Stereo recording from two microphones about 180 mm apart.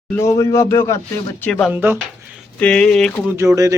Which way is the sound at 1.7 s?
10° right (ahead or behind).